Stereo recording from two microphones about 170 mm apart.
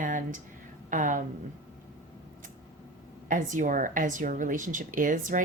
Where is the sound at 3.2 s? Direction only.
50° right (ahead or behind).